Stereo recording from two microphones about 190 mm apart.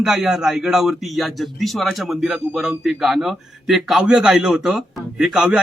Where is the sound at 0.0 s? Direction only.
5° right (ahead or behind).